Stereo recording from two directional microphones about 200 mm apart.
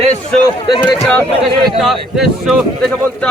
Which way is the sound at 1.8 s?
Centre (ahead or behind).